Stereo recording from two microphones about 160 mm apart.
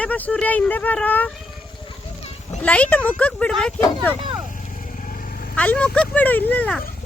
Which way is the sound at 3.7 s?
15° left (ahead or behind).